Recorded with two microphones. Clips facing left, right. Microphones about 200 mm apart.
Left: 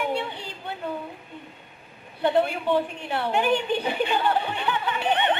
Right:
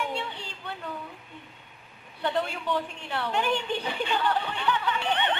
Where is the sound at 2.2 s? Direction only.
15° left (ahead or behind).